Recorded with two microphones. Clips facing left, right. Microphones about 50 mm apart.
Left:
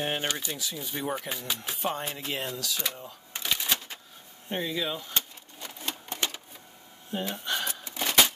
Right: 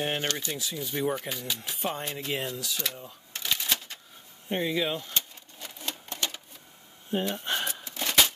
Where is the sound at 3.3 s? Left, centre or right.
Centre.